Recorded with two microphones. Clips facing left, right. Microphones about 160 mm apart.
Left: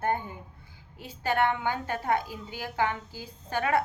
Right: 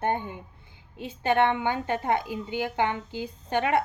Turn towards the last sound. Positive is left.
turn(degrees=-20)  # may be behind; listen again after turning